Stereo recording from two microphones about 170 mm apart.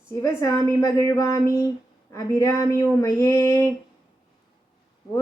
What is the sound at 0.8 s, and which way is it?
Speech, 20° left (ahead or behind).